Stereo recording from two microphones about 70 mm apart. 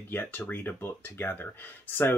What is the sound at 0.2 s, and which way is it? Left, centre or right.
Speech, left.